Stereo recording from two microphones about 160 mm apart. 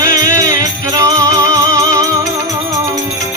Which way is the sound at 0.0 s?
20° right (ahead or behind).